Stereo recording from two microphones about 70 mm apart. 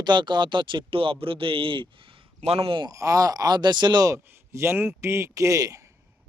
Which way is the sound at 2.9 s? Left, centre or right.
Right.